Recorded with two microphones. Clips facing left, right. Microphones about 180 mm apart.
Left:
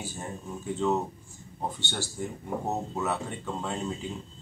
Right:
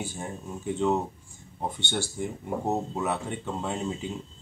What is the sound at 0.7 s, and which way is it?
Speech, 15° right (ahead or behind).